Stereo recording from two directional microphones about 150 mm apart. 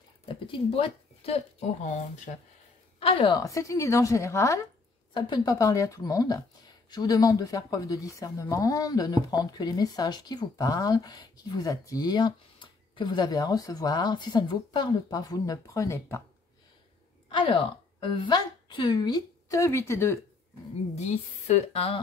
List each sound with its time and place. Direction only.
0.3 s speech: 35° left (ahead or behind)
3.0 s a woman's voice: 40° left (ahead or behind)
3.3 s speech: 20° left (ahead or behind)
17.3 s a woman's voice: 35° left (ahead or behind); by 20.2 s 15° left (ahead or behind)
20.9 s a woman's voice: 45° left (ahead or behind)